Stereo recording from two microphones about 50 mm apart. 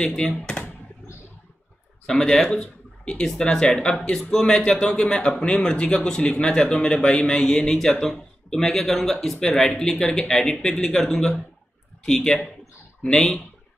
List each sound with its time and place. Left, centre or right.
0.0 s speech: centre
0.4 s computer keyboard: left
2.0 s speech: centre